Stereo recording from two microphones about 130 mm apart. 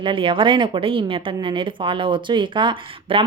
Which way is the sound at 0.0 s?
40° right (ahead or behind).